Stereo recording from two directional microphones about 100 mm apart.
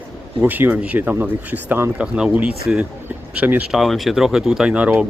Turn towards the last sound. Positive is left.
turn(degrees=-10)  # may be behind; listen again after turning